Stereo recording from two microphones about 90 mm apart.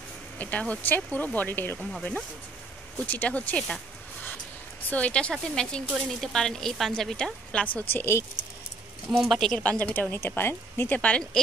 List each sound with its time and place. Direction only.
0.4 s speech: 15° left (ahead or behind)
3.1 s speech: 15° left (ahead or behind)
4.8 s a woman's voice: 15° left (ahead or behind)
7.9 s speech: 30° left (ahead or behind)
9.1 s speech: centre (ahead or behind)